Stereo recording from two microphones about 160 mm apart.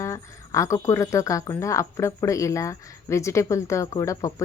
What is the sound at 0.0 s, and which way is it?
Speech, 20° left (ahead or behind).